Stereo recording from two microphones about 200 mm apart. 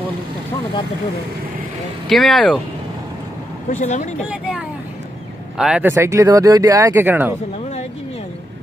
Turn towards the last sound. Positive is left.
turn(degrees=-10)  # may be behind; listen again after turning